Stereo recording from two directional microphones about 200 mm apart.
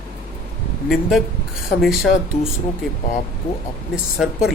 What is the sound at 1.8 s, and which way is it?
Speech, centre (ahead or behind).